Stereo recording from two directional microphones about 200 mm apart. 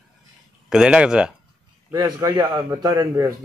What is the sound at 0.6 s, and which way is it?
Speech, 5° right (ahead or behind).